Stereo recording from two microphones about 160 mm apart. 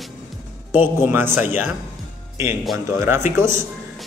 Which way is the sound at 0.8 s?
15° right (ahead or behind).